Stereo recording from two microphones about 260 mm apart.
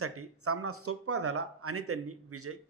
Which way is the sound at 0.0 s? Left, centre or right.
Right.